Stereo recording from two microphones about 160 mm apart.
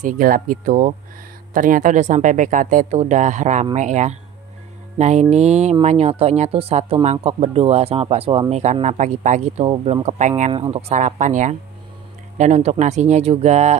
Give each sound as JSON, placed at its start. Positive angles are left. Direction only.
{"t": 0.0, "sound": "speech", "side_deg": -55}
{"t": 4.9, "sound": "music", "side_deg": -45}
{"t": 5.3, "sound": "speech", "side_deg": -45}
{"t": 8.8, "sound": "speech", "side_deg": -50}
{"t": 10.5, "sound": "speech", "side_deg": -35}